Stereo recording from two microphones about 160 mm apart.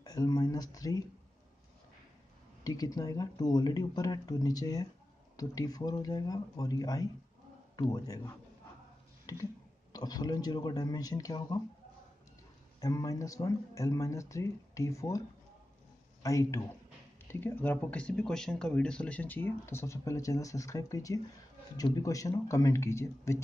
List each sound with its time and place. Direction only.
0.0 s speech: 25° left (ahead or behind)
2.6 s speech: 25° left (ahead or behind)
9.3 s a sound: 20° left (ahead or behind)
9.9 s speech: 25° left (ahead or behind)
12.8 s a man's voice: 20° left (ahead or behind)